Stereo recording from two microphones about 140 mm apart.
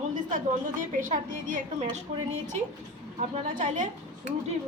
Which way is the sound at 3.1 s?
60° right (ahead or behind).